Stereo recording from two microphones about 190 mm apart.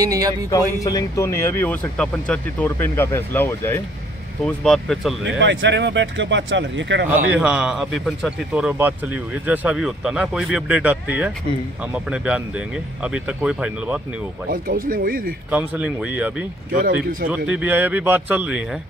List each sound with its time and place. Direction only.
0.0 s speech: 20° right (ahead or behind)
0.8 s speech: 15° left (ahead or behind)
5.4 s speech: 70° right (ahead or behind)
7.3 s speech: 5° right (ahead or behind)
14.9 s speech: 50° right (ahead or behind)
15.5 s speech: 5° right (ahead or behind)
16.7 s speech: 50° right (ahead or behind)
17.5 s speech: 10° right (ahead or behind)